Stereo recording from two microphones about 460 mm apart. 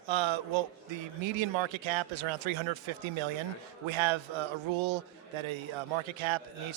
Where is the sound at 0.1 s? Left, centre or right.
Right.